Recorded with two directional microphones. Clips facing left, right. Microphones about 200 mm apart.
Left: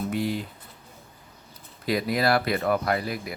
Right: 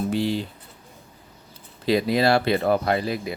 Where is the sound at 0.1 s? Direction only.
30° right (ahead or behind).